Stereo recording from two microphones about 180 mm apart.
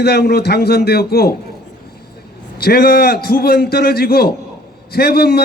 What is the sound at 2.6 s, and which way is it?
A man's voice, 60° left (ahead or behind).